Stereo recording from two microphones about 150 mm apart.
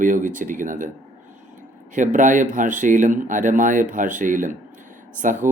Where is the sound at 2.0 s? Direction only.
60° right (ahead or behind).